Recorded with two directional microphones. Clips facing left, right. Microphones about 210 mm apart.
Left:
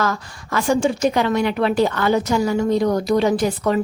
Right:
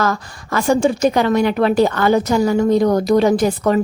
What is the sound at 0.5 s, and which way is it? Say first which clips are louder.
A woman's voice: right 3 dB; 40° right (ahead or behind).